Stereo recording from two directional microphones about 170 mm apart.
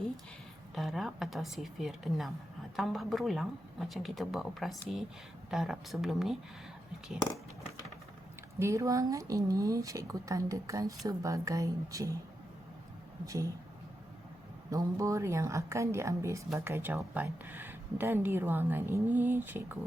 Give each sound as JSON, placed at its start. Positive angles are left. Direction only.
{"t": 0.8, "sound": "speech", "side_deg": 0}
{"t": 8.5, "sound": "speech", "side_deg": -15}
{"t": 13.2, "sound": "speech", "side_deg": -20}
{"t": 14.7, "sound": "speech", "side_deg": -20}